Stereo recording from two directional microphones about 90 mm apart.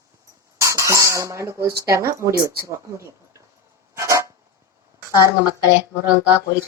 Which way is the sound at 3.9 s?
35° right (ahead or behind).